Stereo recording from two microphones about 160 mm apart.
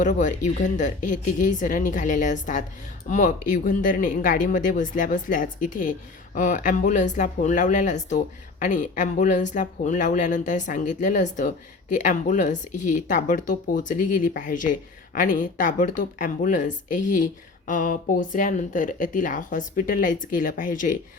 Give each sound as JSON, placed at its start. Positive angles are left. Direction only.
{"t": 0.0, "sound": "speech", "side_deg": 50}